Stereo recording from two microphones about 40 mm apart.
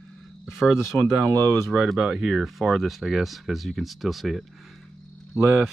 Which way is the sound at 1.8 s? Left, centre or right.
Centre.